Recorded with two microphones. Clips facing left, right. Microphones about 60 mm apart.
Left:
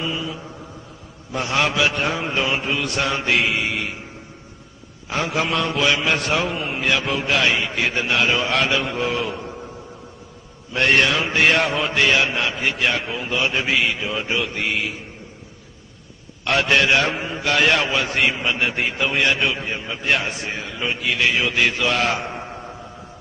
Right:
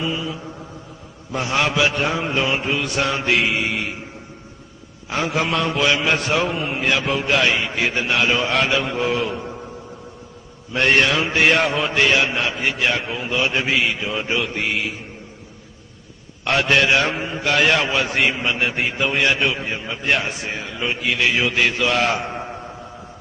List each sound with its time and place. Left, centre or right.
0.0 s mantra: centre
1.3 s a man's voice: centre
5.1 s a man's voice: centre
10.7 s a man's voice: centre
16.4 s a man's voice: centre